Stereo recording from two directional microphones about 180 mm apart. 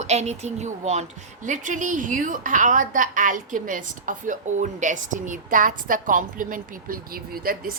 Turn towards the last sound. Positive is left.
turn(degrees=-55)  # may be behind; listen again after turning